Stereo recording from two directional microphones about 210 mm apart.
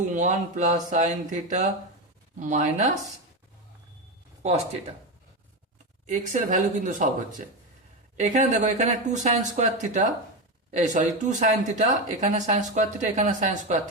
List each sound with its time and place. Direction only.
0.1 s speech: 35° right (ahead or behind)
4.4 s speech: 30° right (ahead or behind)
6.1 s speech: 35° right (ahead or behind)
8.1 s speech: 35° right (ahead or behind)